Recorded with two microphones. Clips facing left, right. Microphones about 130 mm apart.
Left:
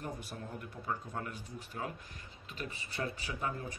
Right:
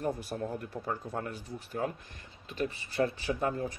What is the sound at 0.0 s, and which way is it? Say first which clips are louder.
Speech: right 9 dB; 35° right (ahead or behind).